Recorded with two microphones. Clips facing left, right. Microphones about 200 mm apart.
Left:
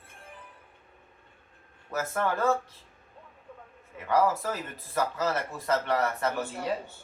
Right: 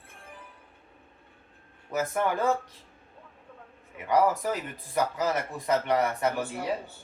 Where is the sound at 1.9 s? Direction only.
15° right (ahead or behind).